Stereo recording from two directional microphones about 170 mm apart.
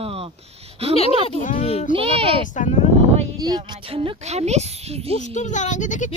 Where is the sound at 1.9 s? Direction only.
35° right (ahead or behind).